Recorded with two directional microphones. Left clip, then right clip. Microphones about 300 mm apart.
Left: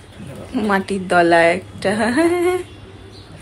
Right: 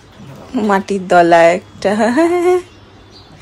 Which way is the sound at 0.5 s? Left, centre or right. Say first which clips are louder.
Right 4 dB; right.